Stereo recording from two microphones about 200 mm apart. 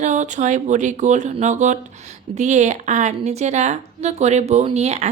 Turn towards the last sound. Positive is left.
turn(degrees=-35)  # may be behind; listen again after turning